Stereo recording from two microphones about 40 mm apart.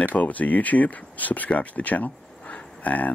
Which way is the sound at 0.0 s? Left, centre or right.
Left.